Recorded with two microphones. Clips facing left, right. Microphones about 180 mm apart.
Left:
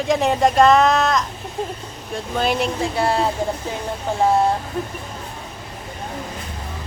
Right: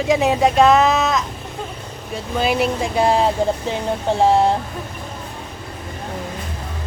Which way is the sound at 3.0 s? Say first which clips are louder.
Right 4 dB; 15° right (ahead or behind).